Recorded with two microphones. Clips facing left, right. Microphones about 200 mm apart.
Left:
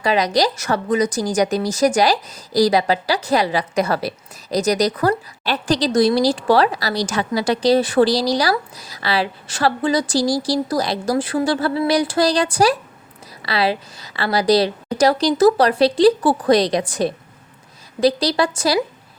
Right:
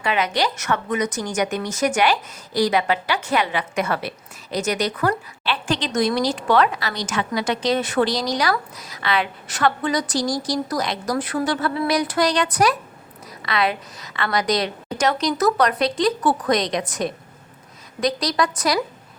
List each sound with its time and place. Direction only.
0.0 s a woman's voice: 35° left (ahead or behind)